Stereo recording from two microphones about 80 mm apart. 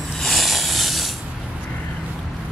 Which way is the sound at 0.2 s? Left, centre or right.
Centre.